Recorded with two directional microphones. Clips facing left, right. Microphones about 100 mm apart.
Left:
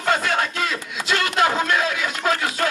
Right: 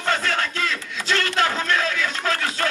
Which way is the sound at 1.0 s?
10° left (ahead or behind).